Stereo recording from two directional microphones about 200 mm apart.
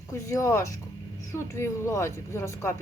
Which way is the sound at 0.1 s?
15° left (ahead or behind).